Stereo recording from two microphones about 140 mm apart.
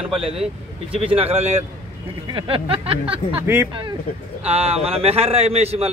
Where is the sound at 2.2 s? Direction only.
40° right (ahead or behind).